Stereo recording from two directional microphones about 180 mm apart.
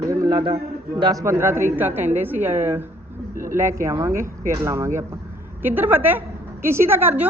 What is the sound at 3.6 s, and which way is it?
A woman's voice, 15° right (ahead or behind).